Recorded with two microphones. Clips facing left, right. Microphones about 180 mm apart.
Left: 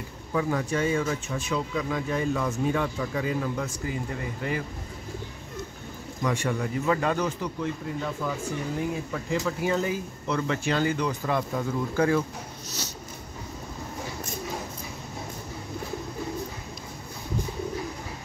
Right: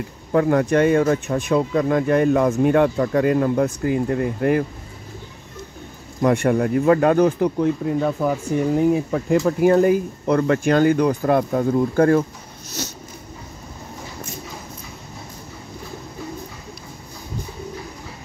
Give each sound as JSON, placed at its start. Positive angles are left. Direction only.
{"t": 0.3, "sound": "speech", "side_deg": -60}
{"t": 6.2, "sound": "speech", "side_deg": -60}